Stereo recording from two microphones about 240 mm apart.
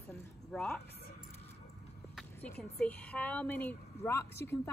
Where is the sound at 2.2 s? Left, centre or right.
Centre.